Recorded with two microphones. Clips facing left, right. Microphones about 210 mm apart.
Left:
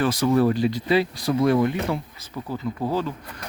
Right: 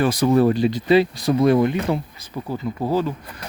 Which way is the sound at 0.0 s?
15° right (ahead or behind).